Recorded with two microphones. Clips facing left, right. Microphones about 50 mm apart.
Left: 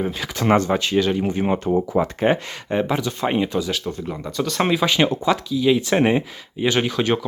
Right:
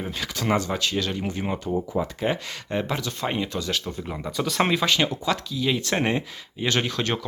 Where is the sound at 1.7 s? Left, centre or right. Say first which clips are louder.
Left 5 dB; left.